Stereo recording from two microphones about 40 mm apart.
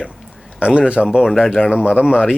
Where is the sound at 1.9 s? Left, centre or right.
Right.